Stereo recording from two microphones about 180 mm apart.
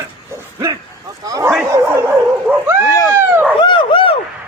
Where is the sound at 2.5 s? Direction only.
5° right (ahead or behind).